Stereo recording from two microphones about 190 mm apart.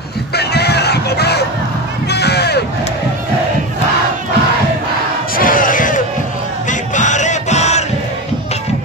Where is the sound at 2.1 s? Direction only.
60° left (ahead or behind).